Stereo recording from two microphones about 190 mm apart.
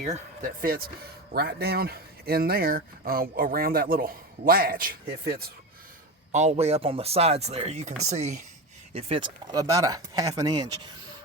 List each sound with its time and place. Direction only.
0.0 s speech: 45° right (ahead or behind)
6.3 s speech: 35° right (ahead or behind); by 10.6 s 20° right (ahead or behind)